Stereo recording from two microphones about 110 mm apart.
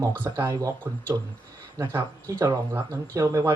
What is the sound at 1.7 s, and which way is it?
Speech, 25° right (ahead or behind).